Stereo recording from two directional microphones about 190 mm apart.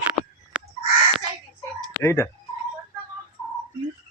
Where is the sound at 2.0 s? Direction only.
15° left (ahead or behind).